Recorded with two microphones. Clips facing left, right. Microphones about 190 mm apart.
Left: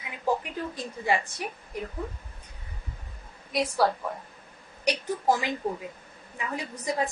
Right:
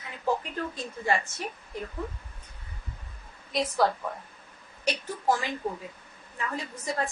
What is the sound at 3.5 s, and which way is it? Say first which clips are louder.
Speech: left 1 dB; 5° left (ahead or behind).